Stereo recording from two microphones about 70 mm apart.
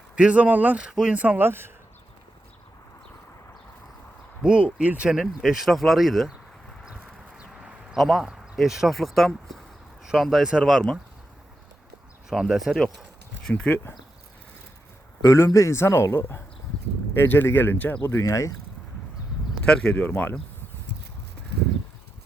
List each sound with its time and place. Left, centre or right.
0.2 s speech: centre
1.4 s speech: right
4.4 s speech: centre
5.4 s speech: centre
7.3 s a sound: centre
8.0 s speech: centre
12.3 s speech: centre
13.6 s speech: left
15.2 s speech: left
17.2 s speech: left
18.2 s speech: left
19.6 s speech: centre